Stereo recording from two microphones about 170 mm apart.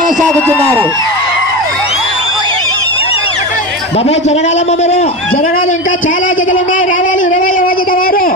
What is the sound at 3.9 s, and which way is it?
A man's voice, 40° left (ahead or behind).